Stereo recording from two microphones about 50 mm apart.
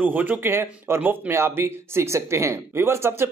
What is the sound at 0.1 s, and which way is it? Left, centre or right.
Speech, right.